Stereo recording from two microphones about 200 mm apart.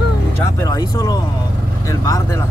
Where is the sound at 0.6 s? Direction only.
15° left (ahead or behind).